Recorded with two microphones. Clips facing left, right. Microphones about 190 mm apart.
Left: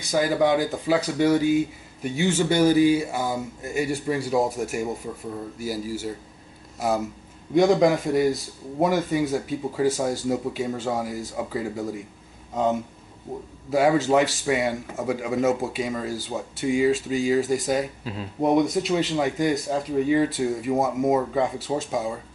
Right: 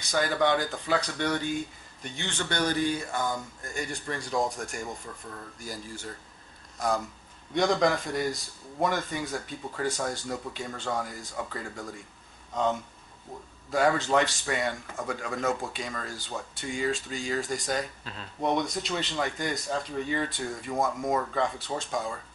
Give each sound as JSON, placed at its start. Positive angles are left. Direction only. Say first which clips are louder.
{"t": 0.0, "sound": "speech", "louder": "left 5 dB", "side_deg": 5}
{"t": 13.7, "sound": "speech", "louder": "left 5 dB", "side_deg": 5}
{"t": 21.1, "sound": "speech", "louder": "left 6 dB", "side_deg": 15}
{"t": 21.4, "sound": "speech", "louder": "left 5 dB", "side_deg": 5}